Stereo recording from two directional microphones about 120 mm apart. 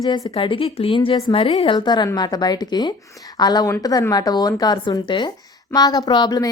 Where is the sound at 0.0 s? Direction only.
35° left (ahead or behind).